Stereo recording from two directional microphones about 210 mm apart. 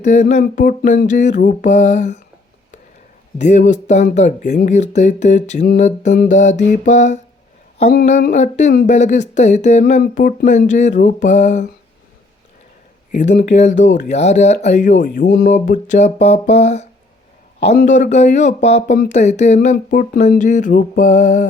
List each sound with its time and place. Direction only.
0.0 s speech: 35° left (ahead or behind)
3.3 s speech: 35° left (ahead or behind)
13.1 s speech: 35° left (ahead or behind)